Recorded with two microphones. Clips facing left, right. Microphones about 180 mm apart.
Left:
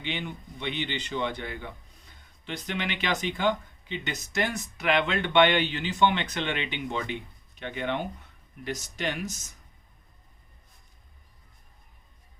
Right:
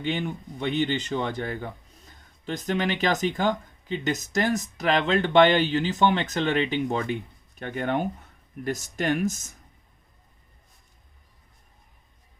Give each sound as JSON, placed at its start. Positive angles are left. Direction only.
{"t": 0.0, "sound": "speech", "side_deg": -45}